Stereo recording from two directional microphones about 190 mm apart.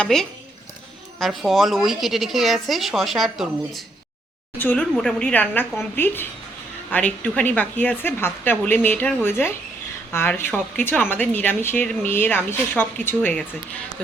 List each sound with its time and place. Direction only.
0.0 s a woman's voice: 5° left (ahead or behind)